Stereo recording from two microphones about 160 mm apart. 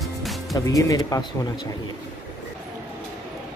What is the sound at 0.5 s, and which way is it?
Speech, 20° left (ahead or behind).